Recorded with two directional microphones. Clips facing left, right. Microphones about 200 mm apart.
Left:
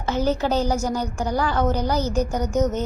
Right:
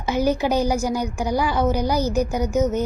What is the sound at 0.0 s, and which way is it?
Speech, 10° right (ahead or behind).